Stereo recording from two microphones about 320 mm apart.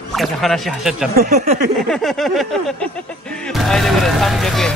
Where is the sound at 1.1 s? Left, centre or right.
Right.